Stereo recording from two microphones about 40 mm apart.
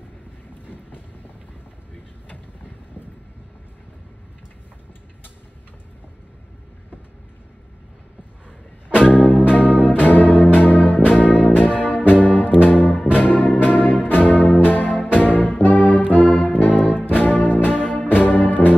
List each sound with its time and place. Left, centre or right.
9.0 s music: left
12.5 s brass instrument: left